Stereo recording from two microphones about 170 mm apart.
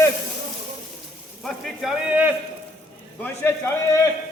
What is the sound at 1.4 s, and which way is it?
Speech, centre (ahead or behind).